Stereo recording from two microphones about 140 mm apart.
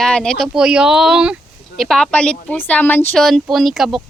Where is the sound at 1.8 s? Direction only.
5° left (ahead or behind).